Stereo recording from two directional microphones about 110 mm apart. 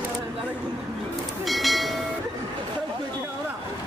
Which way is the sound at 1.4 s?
Centre (ahead or behind).